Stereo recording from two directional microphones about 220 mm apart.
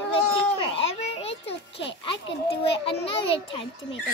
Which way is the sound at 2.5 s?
25° left (ahead or behind).